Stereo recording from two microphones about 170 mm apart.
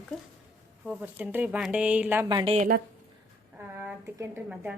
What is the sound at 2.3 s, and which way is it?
Speech, 30° right (ahead or behind).